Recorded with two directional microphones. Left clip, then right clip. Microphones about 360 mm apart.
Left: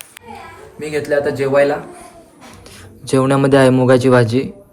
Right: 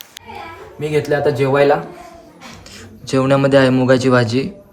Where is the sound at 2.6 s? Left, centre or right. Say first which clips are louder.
Left 5 dB; centre.